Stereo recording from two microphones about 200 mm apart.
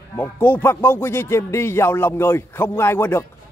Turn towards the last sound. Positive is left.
turn(degrees=10)  # may be behind; listen again after turning